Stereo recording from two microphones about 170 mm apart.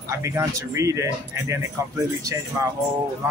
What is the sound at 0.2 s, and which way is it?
Speech, 15° right (ahead or behind).